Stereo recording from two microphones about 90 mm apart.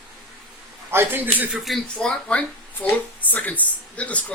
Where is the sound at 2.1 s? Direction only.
15° left (ahead or behind).